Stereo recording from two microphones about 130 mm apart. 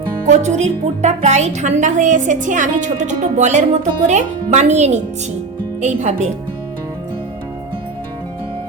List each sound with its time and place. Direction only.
0.3 s speech: 60° right (ahead or behind)